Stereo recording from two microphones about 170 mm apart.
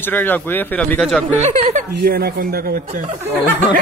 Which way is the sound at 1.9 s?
65° right (ahead or behind).